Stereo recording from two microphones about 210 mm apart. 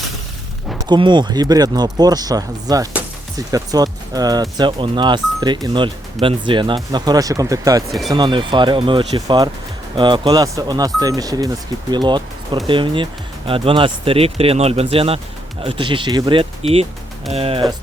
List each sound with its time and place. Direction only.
0.9 s speech: 20° right (ahead or behind)